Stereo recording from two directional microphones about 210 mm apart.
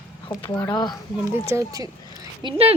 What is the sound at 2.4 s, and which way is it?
Speech, 30° right (ahead or behind).